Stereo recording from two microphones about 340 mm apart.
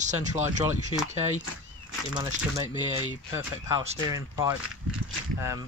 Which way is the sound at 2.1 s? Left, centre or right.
Centre.